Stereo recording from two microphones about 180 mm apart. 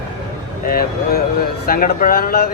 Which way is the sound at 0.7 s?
55° left (ahead or behind).